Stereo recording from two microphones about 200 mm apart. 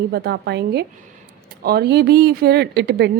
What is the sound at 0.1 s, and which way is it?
Speech, 55° right (ahead or behind).